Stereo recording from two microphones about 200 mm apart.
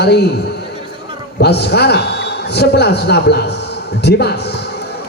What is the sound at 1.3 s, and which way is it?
A man's voice, 55° left (ahead or behind).